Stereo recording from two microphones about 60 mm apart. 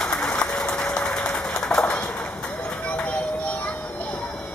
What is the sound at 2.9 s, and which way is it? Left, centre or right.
Music, centre.